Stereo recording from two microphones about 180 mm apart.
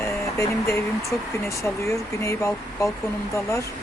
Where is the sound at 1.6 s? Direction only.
15° left (ahead or behind).